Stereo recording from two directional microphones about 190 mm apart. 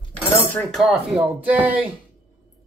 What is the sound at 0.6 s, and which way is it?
Speech, centre (ahead or behind).